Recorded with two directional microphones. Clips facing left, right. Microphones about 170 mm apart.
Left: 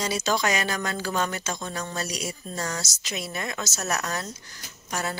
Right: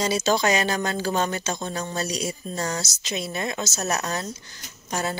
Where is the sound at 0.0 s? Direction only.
30° right (ahead or behind).